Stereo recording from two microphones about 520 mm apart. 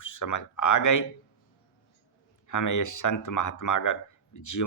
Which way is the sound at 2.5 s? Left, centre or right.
Left.